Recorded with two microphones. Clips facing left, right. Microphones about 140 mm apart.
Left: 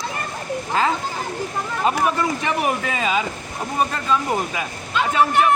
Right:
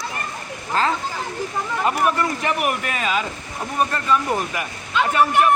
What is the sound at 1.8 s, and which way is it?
Speech, 20° left (ahead or behind).